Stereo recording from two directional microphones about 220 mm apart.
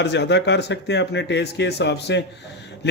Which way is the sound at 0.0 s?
50° left (ahead or behind).